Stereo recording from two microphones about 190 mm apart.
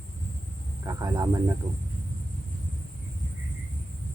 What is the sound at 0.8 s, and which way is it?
Speech, 20° right (ahead or behind).